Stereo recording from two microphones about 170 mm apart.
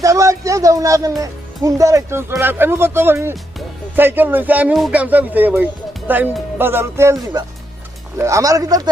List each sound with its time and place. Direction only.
0.0 s speech: 20° right (ahead or behind)